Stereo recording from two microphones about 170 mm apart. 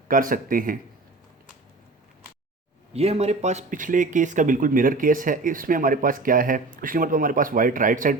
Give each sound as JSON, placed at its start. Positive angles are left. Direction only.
{"t": 0.1, "sound": "speech", "side_deg": -55}
{"t": 2.9, "sound": "speech", "side_deg": -35}